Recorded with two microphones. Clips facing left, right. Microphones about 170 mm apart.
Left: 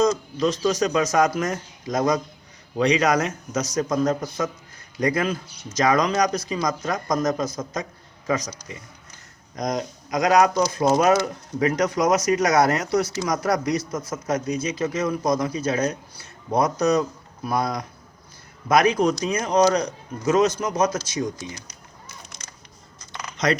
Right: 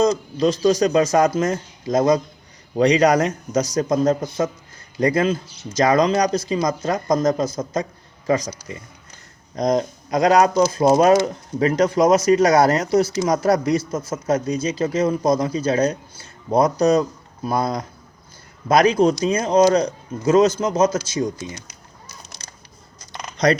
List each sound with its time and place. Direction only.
0.0 s speech: 35° right (ahead or behind)
9.6 s speech: 30° right (ahead or behind)
23.0 s a sound: 35° right (ahead or behind)